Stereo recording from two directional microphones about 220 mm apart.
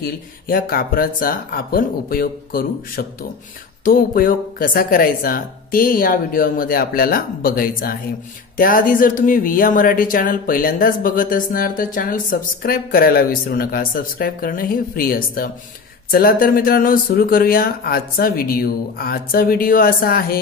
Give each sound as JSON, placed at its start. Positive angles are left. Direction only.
{"t": 0.0, "sound": "speech", "side_deg": 40}